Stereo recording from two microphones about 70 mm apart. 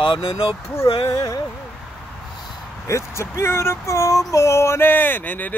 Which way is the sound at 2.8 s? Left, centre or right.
Left.